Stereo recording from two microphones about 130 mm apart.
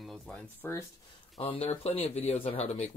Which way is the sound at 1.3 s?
50° left (ahead or behind).